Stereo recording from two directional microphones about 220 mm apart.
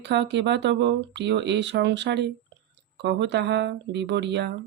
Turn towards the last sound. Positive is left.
turn(degrees=-50)  # may be behind; listen again after turning